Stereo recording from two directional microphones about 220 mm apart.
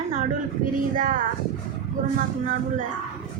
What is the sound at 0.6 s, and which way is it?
Speech, 35° right (ahead or behind).